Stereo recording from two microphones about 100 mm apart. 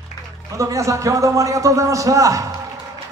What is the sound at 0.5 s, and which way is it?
A man's voice, 30° right (ahead or behind).